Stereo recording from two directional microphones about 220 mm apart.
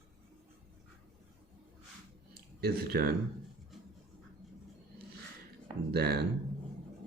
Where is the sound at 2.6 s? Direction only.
45° right (ahead or behind).